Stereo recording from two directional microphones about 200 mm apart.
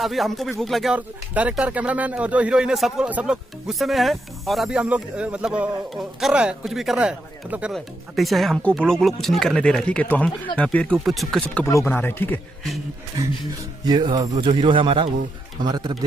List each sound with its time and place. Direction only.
0.0 s speech: centre (ahead or behind)
11.5 s speech: 10° left (ahead or behind)
13.8 s speech: 20° right (ahead or behind)